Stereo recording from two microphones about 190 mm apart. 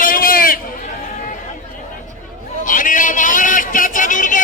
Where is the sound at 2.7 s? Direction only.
45° left (ahead or behind).